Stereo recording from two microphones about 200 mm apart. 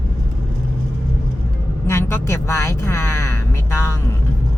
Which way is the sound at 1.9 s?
15° left (ahead or behind).